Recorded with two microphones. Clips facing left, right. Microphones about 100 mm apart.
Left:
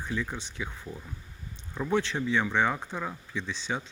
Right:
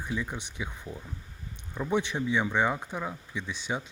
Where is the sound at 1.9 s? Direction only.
15° right (ahead or behind).